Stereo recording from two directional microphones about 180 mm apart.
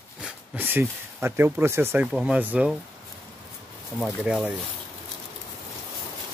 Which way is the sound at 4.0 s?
Centre (ahead or behind).